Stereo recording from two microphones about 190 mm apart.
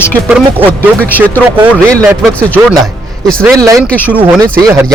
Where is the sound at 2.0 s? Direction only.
5° left (ahead or behind).